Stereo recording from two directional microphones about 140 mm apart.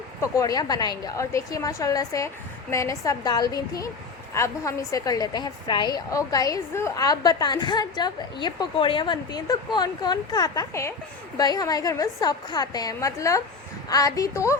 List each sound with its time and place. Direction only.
0.2 s a woman's voice: 25° left (ahead or behind)